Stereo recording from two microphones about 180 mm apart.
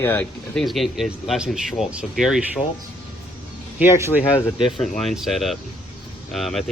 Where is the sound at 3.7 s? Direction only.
15° right (ahead or behind).